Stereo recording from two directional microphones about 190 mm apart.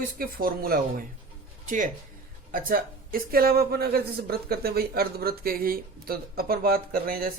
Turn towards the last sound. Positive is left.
turn(degrees=-50)  # may be behind; listen again after turning